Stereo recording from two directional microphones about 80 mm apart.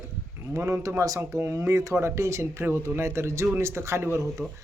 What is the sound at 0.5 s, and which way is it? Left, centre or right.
Speech, right.